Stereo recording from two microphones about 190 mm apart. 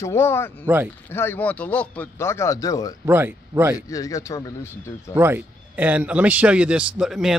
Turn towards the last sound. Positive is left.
turn(degrees=-5)  # may be behind; listen again after turning